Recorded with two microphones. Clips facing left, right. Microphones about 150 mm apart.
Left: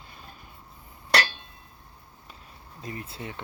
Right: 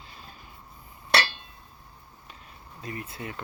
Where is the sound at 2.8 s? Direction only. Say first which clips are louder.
Even; 30° left (ahead or behind).